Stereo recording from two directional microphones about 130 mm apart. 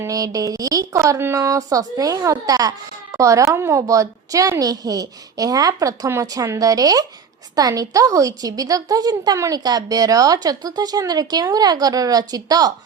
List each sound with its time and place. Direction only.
0.0 s speech: 25° right (ahead or behind)